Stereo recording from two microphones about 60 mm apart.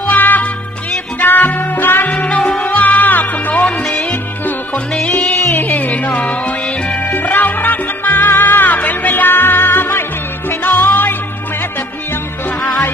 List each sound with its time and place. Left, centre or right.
0.0 s music: left
2.1 s music: left
5.0 s music: left